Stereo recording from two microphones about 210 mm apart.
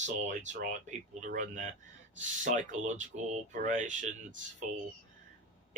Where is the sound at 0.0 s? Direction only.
35° right (ahead or behind).